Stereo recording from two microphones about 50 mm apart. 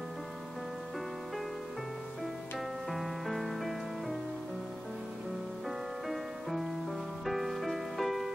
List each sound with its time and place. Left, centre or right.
2.9 s music: centre
6.0 s music: centre